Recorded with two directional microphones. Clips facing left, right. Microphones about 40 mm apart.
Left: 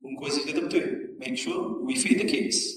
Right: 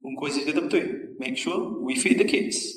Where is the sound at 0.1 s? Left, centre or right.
Right.